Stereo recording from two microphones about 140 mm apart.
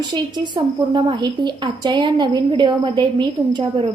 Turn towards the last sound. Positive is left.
turn(degrees=-35)  # may be behind; listen again after turning